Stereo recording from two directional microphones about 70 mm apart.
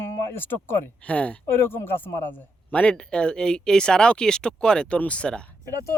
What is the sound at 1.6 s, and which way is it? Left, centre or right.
Speech, left.